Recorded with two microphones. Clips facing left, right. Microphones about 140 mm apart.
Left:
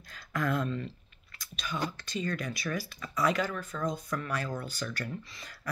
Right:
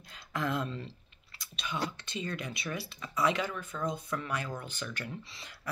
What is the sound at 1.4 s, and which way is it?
Speech, 25° right (ahead or behind).